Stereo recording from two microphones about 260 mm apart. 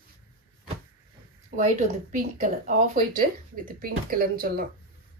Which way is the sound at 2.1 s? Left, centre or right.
Right.